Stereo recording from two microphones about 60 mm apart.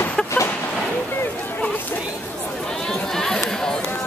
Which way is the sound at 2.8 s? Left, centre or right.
Centre.